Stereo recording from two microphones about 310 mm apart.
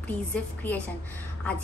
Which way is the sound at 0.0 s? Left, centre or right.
Centre.